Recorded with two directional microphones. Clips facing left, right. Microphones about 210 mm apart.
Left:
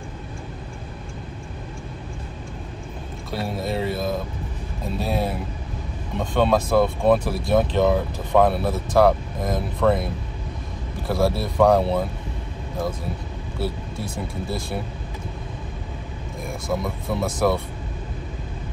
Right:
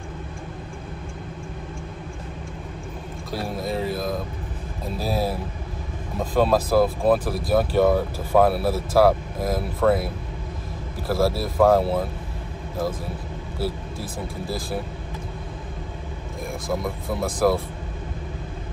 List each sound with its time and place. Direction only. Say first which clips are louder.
3.3 s speech: left 1 dB; centre (ahead or behind)
11.1 s speech: even; centre (ahead or behind)
13.6 s speech: even; centre (ahead or behind)
16.4 s speech: left 1 dB; centre (ahead or behind)